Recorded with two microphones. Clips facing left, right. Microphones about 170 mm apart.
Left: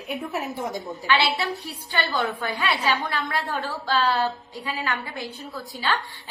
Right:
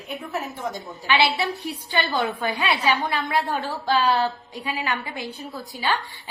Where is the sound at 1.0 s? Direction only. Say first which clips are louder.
Right 2 dB; 20° right (ahead or behind).